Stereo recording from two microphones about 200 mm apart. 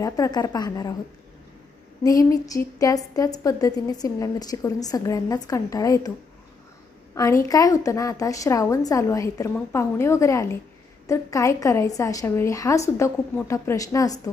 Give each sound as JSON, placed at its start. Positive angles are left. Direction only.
{"t": 0.0, "sound": "a woman's voice", "side_deg": 20}
{"t": 2.0, "sound": "a woman's voice", "side_deg": 15}
{"t": 7.4, "sound": "a woman's voice", "side_deg": 15}